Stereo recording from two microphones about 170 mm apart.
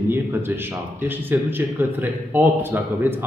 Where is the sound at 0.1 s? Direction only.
15° right (ahead or behind).